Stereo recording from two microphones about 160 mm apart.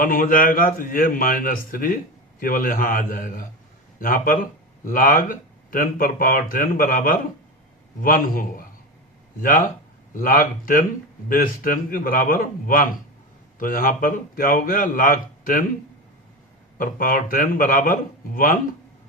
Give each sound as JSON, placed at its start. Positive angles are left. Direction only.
{"t": 0.0, "sound": "speech", "side_deg": 60}
{"t": 16.7, "sound": "speech", "side_deg": 60}